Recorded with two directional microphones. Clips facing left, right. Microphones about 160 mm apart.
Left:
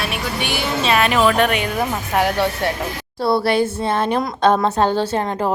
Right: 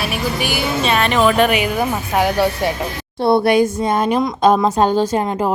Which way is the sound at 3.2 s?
20° right (ahead or behind).